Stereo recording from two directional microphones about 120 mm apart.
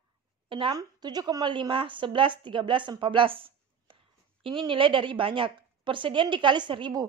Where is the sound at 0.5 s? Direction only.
45° right (ahead or behind).